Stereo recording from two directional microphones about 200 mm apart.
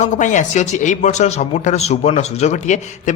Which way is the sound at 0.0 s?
40° left (ahead or behind).